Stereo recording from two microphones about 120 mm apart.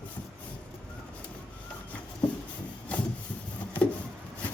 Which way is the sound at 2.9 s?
10° left (ahead or behind).